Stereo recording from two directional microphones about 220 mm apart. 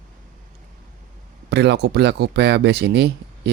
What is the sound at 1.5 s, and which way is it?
Speech, 50° right (ahead or behind).